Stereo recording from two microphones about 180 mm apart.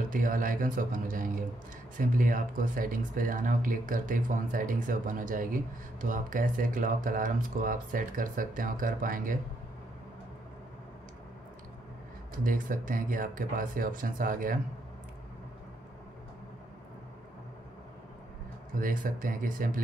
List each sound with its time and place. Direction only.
0.1 s speech: 50° right (ahead or behind)
12.4 s speech: 50° right (ahead or behind)
18.8 s speech: 50° right (ahead or behind)